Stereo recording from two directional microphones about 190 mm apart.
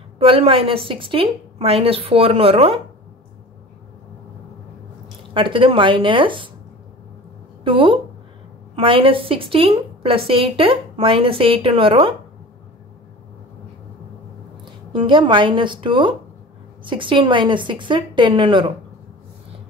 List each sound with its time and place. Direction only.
0.2 s a woman's voice: 30° right (ahead or behind)
5.3 s a woman's voice: 25° right (ahead or behind)
7.6 s a woman's voice: 25° right (ahead or behind)
14.6 s a woman's voice: 25° right (ahead or behind)